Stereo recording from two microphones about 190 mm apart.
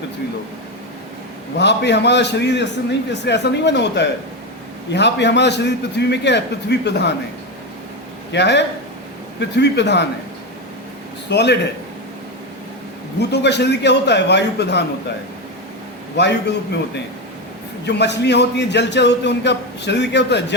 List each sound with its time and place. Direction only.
1.5 s a man's voice: 65° left (ahead or behind)
8.3 s a man's voice: 65° left (ahead or behind)
11.3 s a man's voice: 65° left (ahead or behind)
13.1 s a man's voice: 65° left (ahead or behind)
16.1 s a man's voice: 65° left (ahead or behind)
17.8 s a man's voice: 65° left (ahead or behind)